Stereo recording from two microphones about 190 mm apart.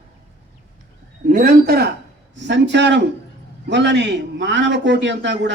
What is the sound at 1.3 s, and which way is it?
Speech, 50° right (ahead or behind).